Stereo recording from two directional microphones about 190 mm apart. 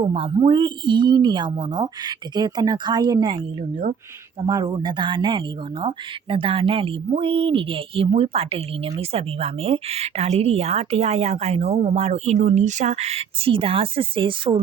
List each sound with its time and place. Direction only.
0.0 s a woman's voice: 30° right (ahead or behind)